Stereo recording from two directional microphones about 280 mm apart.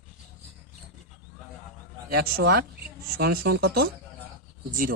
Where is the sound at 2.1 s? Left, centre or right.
Right.